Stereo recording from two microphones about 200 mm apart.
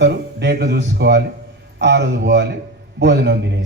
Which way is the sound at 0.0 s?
55° right (ahead or behind).